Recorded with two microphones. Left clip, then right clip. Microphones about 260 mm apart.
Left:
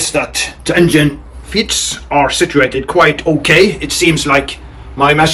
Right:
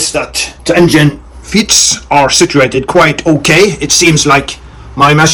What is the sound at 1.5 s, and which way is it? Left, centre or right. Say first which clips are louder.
Speech: right 6 dB; centre.